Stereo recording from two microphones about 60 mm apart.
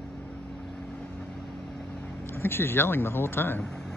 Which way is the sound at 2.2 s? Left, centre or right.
Left.